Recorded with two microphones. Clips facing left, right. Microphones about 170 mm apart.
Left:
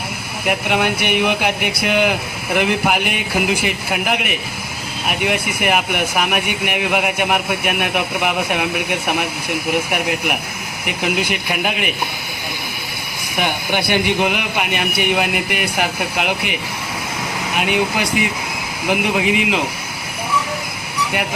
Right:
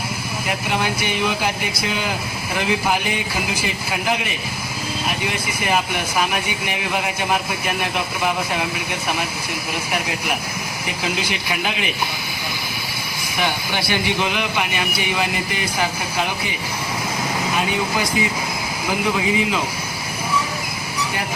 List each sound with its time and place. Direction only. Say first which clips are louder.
0.4 s speech: left 5 dB; 60° left (ahead or behind)
13.4 s speech: left 3 dB; 55° left (ahead or behind)
17.7 s speech: left 3 dB; 65° left (ahead or behind)